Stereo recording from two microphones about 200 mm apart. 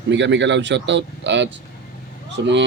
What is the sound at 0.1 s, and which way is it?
Speech, 65° right (ahead or behind).